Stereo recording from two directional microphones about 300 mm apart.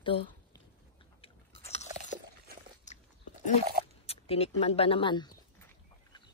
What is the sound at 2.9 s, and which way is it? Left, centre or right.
Biting, left.